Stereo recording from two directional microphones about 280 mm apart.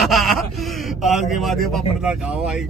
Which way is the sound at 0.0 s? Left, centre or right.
Centre.